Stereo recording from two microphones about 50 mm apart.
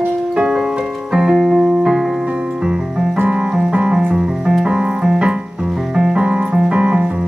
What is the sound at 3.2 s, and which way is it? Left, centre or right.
Music, centre.